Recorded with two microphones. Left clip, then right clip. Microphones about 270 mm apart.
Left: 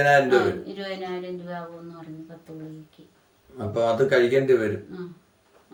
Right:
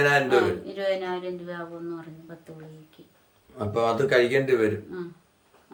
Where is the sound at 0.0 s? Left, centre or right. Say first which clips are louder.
Left 2 dB; centre.